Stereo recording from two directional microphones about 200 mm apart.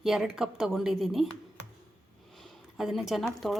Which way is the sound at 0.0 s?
Centre (ahead or behind).